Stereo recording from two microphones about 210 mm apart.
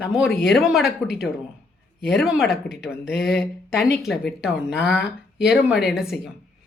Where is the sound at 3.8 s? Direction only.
50° left (ahead or behind).